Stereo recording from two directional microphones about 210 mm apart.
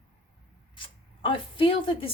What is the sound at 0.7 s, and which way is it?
Speech, 25° left (ahead or behind).